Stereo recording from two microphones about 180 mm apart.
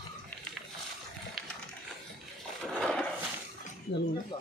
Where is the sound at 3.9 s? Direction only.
80° left.